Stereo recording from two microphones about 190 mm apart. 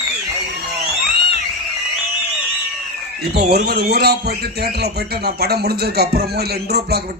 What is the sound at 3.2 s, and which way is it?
Speech, 55° right (ahead or behind).